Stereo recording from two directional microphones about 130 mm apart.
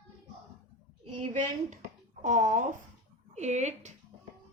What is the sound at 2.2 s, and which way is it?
Speech, 70° right (ahead or behind).